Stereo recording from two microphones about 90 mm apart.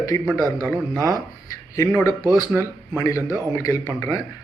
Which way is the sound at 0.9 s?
40° right (ahead or behind).